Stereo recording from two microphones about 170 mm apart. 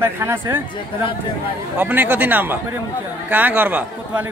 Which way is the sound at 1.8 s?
10° right (ahead or behind).